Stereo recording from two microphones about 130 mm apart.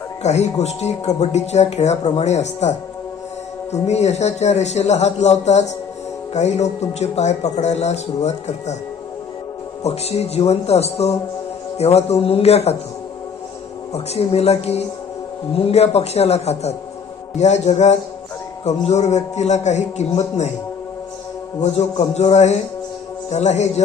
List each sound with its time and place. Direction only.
0.2 s speech: 60° left (ahead or behind)
9.8 s a man's voice: 55° left (ahead or behind)
13.9 s speech: 55° left (ahead or behind)
21.6 s speech: 55° left (ahead or behind)